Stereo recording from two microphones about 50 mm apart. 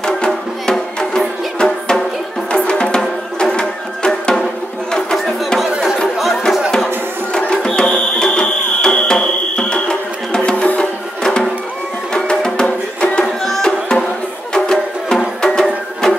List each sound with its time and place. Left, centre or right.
0.3 s music: centre
4.9 s music: centre
5.6 s chatter: centre
7.3 s music: centre
13.4 s music: centre